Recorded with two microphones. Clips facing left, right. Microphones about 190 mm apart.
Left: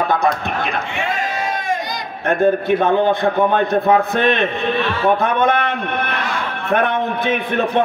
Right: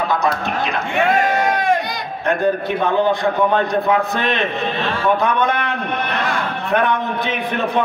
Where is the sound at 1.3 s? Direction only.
65° right (ahead or behind).